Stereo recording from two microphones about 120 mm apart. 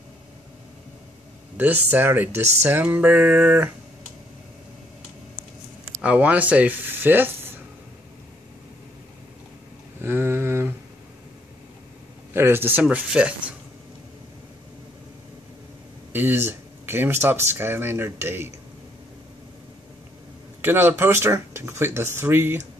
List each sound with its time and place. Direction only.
1.6 s speech: 15° right (ahead or behind)
5.9 s speech: 10° right (ahead or behind)
10.0 s a sound: 20° right (ahead or behind)
12.4 s speech: 20° right (ahead or behind)
16.1 s speech: 15° right (ahead or behind)
20.6 s speech: 15° right (ahead or behind)